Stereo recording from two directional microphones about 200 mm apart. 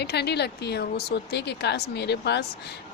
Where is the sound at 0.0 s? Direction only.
55° left (ahead or behind).